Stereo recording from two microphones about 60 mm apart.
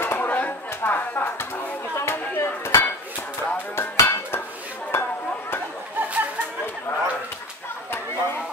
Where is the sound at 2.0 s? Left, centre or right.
Left.